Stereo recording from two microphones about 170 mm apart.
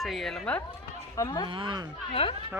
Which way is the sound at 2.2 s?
35° left (ahead or behind).